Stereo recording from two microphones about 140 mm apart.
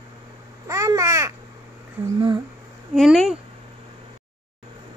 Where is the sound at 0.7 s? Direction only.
20° right (ahead or behind).